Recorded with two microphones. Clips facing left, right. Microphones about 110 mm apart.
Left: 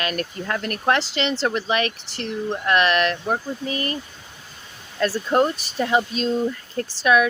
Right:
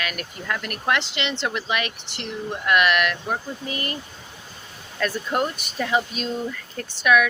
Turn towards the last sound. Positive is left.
turn(degrees=30)  # may be behind; listen again after turning